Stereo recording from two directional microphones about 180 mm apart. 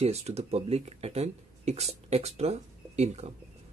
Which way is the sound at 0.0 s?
35° right (ahead or behind).